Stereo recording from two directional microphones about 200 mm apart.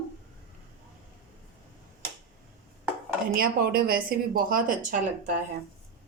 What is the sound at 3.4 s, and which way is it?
A woman's voice, 45° right (ahead or behind).